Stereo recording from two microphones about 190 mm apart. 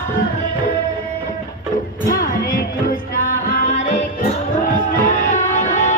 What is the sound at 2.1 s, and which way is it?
Music, 45° left (ahead or behind).